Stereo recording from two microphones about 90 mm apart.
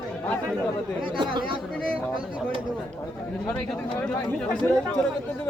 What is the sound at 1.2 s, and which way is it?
Speech, 60° right (ahead or behind).